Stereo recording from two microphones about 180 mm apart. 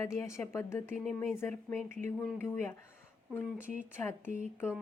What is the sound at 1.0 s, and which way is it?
Speech, centre (ahead or behind).